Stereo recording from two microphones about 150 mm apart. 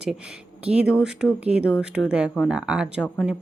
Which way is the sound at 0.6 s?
5° right (ahead or behind).